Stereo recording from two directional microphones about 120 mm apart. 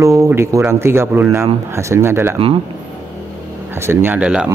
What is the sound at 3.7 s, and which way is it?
Speech, 20° right (ahead or behind).